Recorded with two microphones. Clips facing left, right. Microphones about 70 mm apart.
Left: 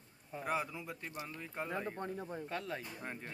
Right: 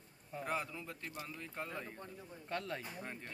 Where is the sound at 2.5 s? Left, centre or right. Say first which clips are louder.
Right 5 dB; centre.